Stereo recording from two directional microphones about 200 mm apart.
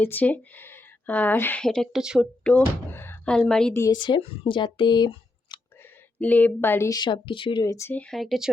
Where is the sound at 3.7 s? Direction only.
20° left (ahead or behind).